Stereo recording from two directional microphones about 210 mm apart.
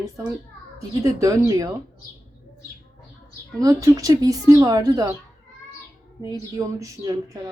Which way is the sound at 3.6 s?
15° right (ahead or behind).